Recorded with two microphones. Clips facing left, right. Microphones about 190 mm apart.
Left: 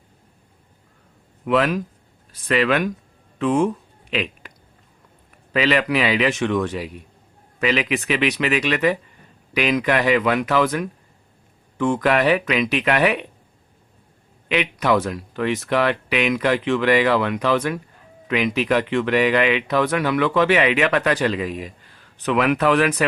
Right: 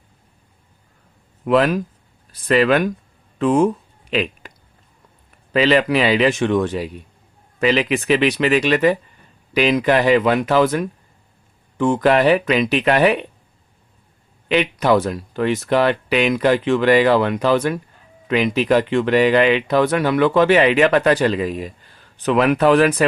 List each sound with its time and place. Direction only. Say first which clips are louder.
1.5 s speech: right 3 dB; 40° right (ahead or behind)
4.1 s a sound: right 4 dB; 35° right (ahead or behind)
5.5 s speech: right 4 dB; 30° right (ahead or behind)
14.4 s speech: right 4 dB; 35° right (ahead or behind)